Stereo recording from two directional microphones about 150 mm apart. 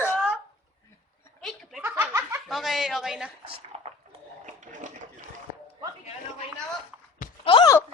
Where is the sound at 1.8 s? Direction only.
15° right (ahead or behind).